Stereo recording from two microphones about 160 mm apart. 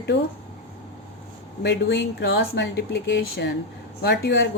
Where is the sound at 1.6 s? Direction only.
90° left.